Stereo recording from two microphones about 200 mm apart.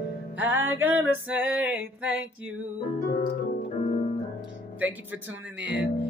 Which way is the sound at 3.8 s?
35° left (ahead or behind).